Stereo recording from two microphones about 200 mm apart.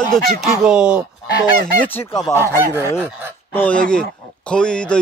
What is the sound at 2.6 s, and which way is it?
Speech, 10° right (ahead or behind).